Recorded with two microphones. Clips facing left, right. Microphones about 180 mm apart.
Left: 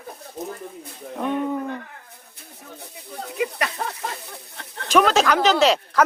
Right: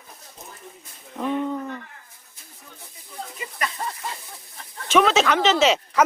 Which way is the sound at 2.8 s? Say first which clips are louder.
Left 2 dB; 70° left (ahead or behind).